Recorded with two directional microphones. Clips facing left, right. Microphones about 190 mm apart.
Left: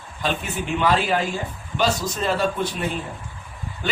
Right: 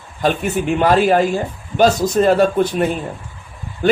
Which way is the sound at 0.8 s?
50° right (ahead or behind).